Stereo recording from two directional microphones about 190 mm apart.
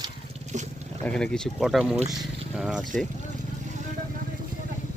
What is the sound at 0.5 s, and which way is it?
Speech, 40° right (ahead or behind).